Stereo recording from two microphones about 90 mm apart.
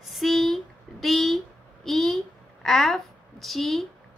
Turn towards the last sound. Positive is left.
turn(degrees=0)  # may be behind; listen again after turning